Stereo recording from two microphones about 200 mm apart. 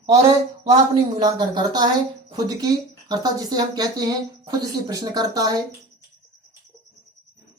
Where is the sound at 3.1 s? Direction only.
20° right (ahead or behind).